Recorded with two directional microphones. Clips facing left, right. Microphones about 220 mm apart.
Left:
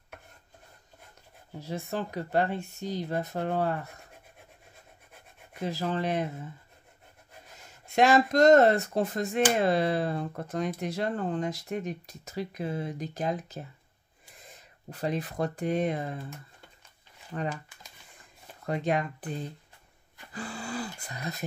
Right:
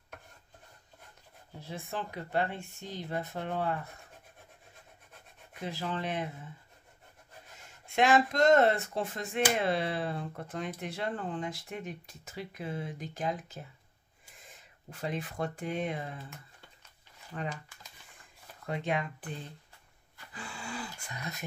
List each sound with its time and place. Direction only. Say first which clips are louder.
1.6 s speech: left 6 dB; 40° left (ahead or behind)
5.5 s speech: left 5 dB; 40° left (ahead or behind)
7.8 s speech: left 3 dB; 40° left (ahead or behind)
14.9 s speech: left 5 dB; 40° left (ahead or behind)
17.3 s speech: left 5 dB; 45° left (ahead or behind)
18.7 s speech: left 5 dB; 40° left (ahead or behind)
20.3 s a sound: left 6 dB; 40° left (ahead or behind)